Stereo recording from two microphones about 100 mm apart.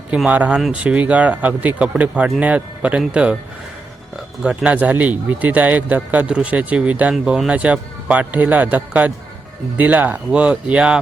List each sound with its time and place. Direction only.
0.3 s speech: 15° right (ahead or behind)
4.4 s speech: 15° right (ahead or behind)